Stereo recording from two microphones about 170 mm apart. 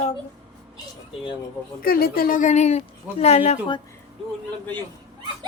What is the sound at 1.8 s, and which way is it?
A woman's voice, 60° left (ahead or behind).